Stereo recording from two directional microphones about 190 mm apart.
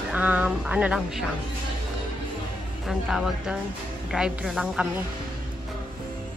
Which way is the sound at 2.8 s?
Centre (ahead or behind).